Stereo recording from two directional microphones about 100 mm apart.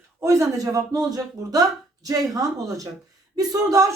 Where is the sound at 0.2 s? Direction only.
30° right (ahead or behind).